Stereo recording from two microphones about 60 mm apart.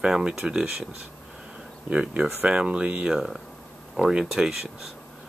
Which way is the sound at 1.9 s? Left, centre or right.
Centre.